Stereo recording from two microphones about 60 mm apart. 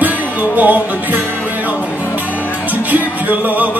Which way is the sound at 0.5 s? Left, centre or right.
Right.